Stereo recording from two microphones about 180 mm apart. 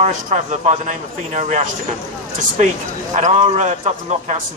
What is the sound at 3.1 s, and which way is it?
A man's voice, 40° right (ahead or behind).